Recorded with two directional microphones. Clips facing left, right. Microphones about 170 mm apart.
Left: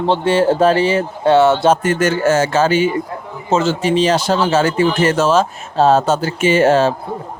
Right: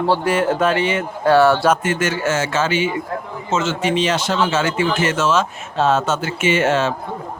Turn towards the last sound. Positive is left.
turn(degrees=35)  # may be behind; listen again after turning